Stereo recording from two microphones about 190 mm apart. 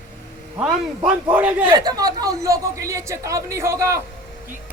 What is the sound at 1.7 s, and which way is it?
Speech, 20° right (ahead or behind).